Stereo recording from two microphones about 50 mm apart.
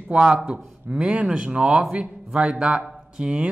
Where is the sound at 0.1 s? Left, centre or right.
Right.